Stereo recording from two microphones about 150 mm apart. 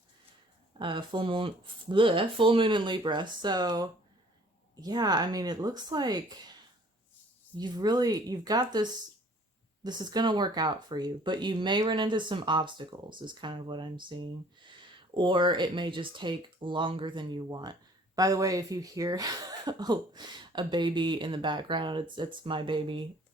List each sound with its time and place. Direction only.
0.8 s a woman's voice: 35° right (ahead or behind)
7.5 s a woman's voice: 25° right (ahead or behind)